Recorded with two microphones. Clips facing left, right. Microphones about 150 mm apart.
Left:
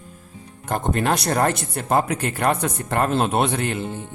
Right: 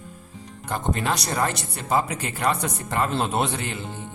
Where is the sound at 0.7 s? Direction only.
55° left (ahead or behind).